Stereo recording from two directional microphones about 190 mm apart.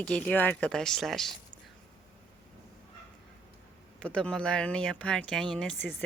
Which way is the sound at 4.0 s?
5° left (ahead or behind).